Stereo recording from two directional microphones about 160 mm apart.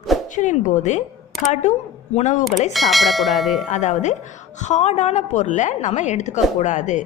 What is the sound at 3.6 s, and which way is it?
A woman's voice, 50° left (ahead or behind).